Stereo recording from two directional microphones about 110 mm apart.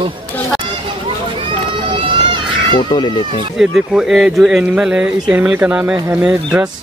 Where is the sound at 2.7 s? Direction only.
45° left (ahead or behind).